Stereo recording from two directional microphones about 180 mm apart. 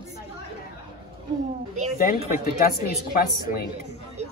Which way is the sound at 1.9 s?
55° left (ahead or behind).